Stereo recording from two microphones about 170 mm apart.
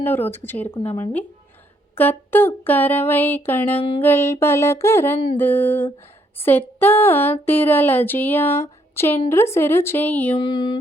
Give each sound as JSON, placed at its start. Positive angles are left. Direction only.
{"t": 0.0, "sound": "speech", "side_deg": 10}
{"t": 2.0, "sound": "speech", "side_deg": 10}
{"t": 3.8, "sound": "music", "side_deg": 30}
{"t": 4.0, "sound": "speech", "side_deg": 15}
{"t": 10.3, "sound": "music", "side_deg": 25}